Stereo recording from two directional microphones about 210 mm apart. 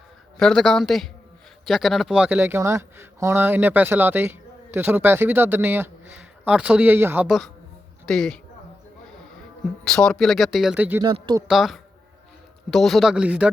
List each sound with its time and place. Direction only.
0.3 s speech: centre (ahead or behind)
9.8 s speech: 5° left (ahead or behind)
11.0 s speech: 20° right (ahead or behind)
11.4 s speech: centre (ahead or behind)